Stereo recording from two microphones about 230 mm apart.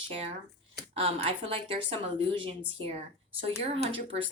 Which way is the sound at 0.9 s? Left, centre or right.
Right.